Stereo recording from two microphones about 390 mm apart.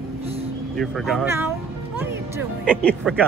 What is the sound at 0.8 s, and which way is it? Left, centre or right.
Speech, centre.